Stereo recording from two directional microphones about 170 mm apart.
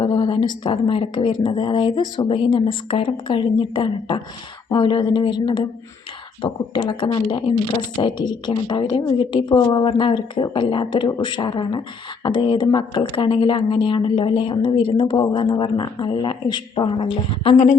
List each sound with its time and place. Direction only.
0.0 s speech: 25° left (ahead or behind)